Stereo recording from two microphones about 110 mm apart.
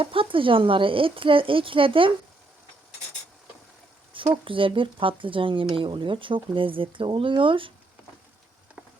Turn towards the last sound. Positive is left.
turn(degrees=-50)  # may be behind; listen again after turning